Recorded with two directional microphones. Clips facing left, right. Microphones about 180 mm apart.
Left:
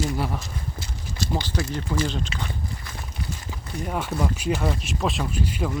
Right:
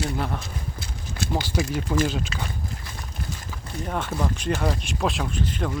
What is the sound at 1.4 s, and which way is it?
Speech, 10° right (ahead or behind).